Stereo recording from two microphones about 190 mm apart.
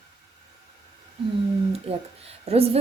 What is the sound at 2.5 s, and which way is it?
Speech, 30° right (ahead or behind).